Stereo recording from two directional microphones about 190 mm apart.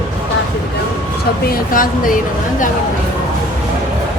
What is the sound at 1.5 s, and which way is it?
A woman's voice, 45° left (ahead or behind).